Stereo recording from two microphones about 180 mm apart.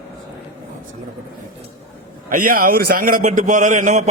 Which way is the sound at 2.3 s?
50° right (ahead or behind).